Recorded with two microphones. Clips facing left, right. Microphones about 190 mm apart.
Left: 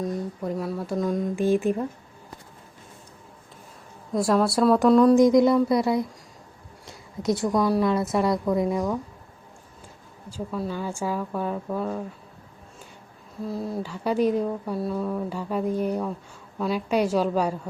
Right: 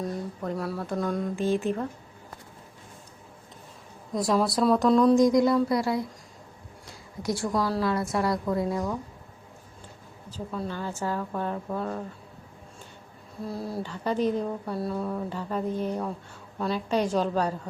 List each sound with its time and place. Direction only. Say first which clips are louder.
0.4 s speech: left 1 dB; centre (ahead or behind)
1.4 s a woman's voice: left 5 dB; 15° left (ahead or behind)
4.1 s speech: left 3 dB; 5° left (ahead or behind)
5.2 s a woman's voice: left 3 dB; 20° left (ahead or behind)
10.2 s a woman's voice: left 3 dB; 5° left (ahead or behind)
13.4 s speech: left 3 dB; centre (ahead or behind)
13.8 s a woman's voice: left 3 dB; 10° left (ahead or behind)